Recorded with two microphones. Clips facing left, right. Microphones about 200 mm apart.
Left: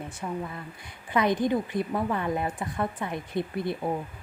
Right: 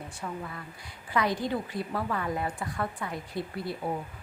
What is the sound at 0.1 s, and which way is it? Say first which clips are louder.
A woman's voice: left 3 dB; 20° left (ahead or behind).